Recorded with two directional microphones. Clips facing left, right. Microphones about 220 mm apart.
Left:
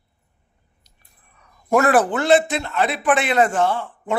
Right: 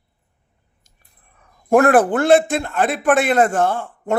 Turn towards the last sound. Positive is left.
turn(degrees=-50)  # may be behind; listen again after turning